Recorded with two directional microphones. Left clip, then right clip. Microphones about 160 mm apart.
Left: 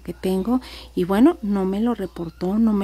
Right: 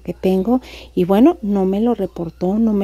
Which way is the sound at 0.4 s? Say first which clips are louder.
Right 5 dB; 5° right (ahead or behind).